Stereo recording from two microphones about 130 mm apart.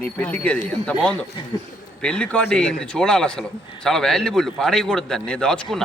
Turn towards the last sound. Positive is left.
turn(degrees=5)  # may be behind; listen again after turning